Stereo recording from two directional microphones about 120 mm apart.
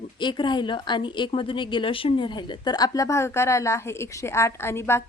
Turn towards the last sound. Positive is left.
turn(degrees=20)  # may be behind; listen again after turning